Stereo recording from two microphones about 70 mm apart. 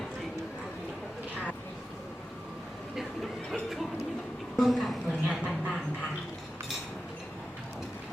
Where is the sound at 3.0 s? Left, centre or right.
Centre.